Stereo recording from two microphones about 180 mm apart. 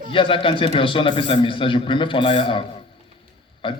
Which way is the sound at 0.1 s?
30° left (ahead or behind).